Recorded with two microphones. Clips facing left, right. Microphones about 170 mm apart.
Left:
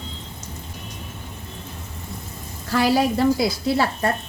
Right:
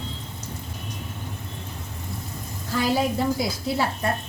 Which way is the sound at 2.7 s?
80° left.